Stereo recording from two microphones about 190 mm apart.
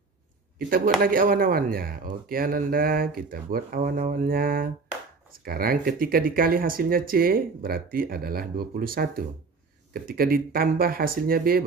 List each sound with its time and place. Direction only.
0.6 s speech: 50° right (ahead or behind)